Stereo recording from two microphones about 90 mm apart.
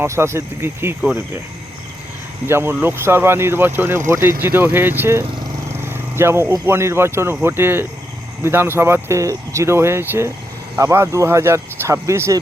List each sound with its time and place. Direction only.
0.0 s speech: 30° right (ahead or behind)
2.5 s speech: 25° right (ahead or behind)